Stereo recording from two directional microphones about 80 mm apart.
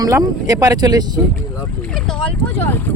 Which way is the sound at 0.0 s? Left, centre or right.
Right.